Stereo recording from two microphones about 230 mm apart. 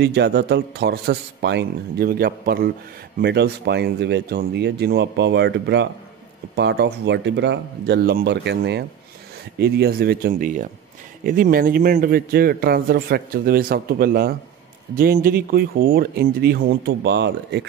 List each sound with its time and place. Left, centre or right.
0.0 s a man's voice: right